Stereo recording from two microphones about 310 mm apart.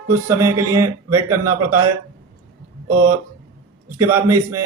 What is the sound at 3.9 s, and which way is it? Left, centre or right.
Speech, centre.